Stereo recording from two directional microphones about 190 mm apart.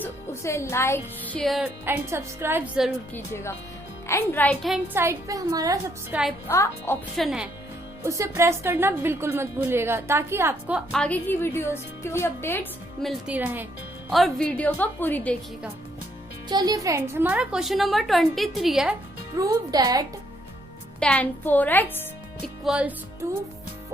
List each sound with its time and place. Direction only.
0.0 s a woman's voice: 15° left (ahead or behind); by 2.9 s 5° right (ahead or behind)
3.1 s speech: 10° left (ahead or behind)
4.9 s a woman's voice: 15° right (ahead or behind)
6.5 s speech: 15° left (ahead or behind)
7.2 s a woman's voice: 5° right (ahead or behind)
8.0 s a woman's voice: 15° right (ahead or behind); by 12.6 s 10° left (ahead or behind)
13.0 s a woman's voice: centre (ahead or behind)
16.5 s a woman's voice: 20° right (ahead or behind); by 18.9 s centre (ahead or behind)
19.4 s speech: 20° right (ahead or behind)
21.0 s speech: 5° left (ahead or behind)
22.6 s a woman's voice: 5° right (ahead or behind)